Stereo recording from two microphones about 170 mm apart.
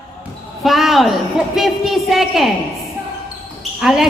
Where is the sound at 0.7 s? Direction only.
Centre (ahead or behind).